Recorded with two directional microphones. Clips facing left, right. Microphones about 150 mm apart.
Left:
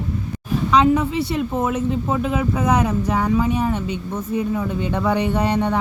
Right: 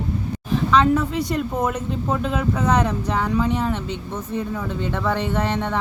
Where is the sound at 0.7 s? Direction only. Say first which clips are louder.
Left 2 dB; 15° left (ahead or behind).